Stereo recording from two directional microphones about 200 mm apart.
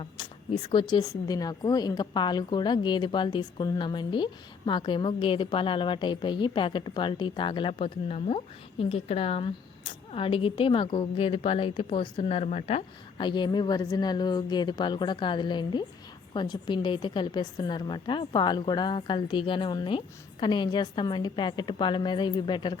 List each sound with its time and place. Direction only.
0.0 s speech: 25° left (ahead or behind)